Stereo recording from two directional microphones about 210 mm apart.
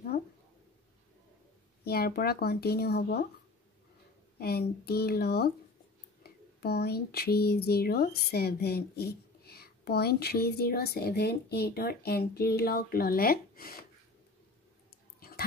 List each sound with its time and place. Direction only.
1.9 s speech: 50° left (ahead or behind)
4.4 s speech: 50° left (ahead or behind)
15.1 s a sound: 45° left (ahead or behind)